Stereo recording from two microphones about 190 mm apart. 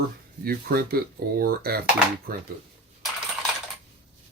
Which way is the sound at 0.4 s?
50° right (ahead or behind).